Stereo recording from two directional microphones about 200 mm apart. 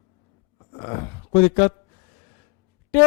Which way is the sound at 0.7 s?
20° left (ahead or behind).